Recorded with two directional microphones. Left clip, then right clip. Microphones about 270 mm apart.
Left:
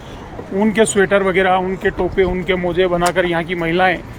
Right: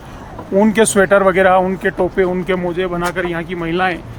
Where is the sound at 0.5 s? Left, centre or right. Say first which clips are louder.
Right 2 dB; centre.